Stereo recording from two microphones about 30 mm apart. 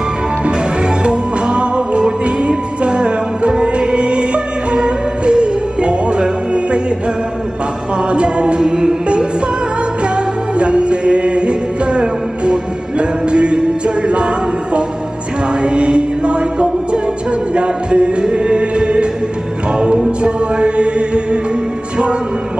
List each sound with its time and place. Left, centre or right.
0.5 s music: right
8.1 s music: right
9.0 s music: right
20.2 s music: right